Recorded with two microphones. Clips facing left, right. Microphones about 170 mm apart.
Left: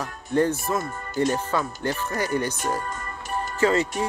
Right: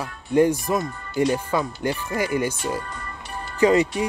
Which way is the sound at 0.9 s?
45° left (ahead or behind).